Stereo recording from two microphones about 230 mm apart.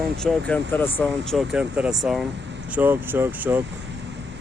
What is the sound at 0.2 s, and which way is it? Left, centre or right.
Speech, centre.